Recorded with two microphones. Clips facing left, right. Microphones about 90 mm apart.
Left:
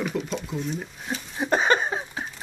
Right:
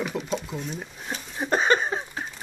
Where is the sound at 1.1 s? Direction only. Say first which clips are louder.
Left 2 dB; 10° left (ahead or behind).